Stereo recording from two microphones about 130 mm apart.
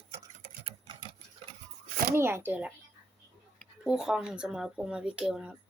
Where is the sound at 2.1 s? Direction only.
20° right (ahead or behind).